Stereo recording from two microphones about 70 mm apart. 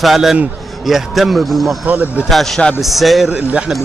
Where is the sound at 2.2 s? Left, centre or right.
Centre.